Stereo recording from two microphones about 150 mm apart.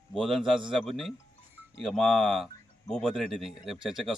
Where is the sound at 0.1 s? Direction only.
Centre (ahead or behind).